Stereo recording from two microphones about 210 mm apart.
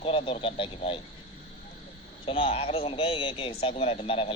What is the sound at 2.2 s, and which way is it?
A man's voice, 25° left (ahead or behind).